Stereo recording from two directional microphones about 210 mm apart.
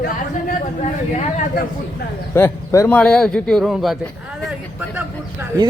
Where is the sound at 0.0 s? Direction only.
35° left (ahead or behind).